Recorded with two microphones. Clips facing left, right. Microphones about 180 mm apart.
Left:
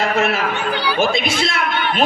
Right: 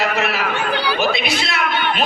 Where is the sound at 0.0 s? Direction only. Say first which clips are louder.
Left 2 dB; 50° left (ahead or behind).